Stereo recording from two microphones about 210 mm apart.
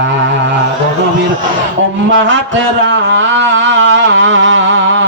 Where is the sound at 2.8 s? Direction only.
60° right (ahead or behind).